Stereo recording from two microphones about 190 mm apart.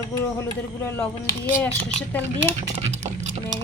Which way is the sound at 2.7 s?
35° right (ahead or behind).